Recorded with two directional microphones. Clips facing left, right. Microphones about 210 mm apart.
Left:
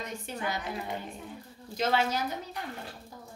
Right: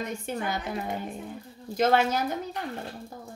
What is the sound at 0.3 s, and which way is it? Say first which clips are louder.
Speech: right 8 dB; 50° right (ahead or behind).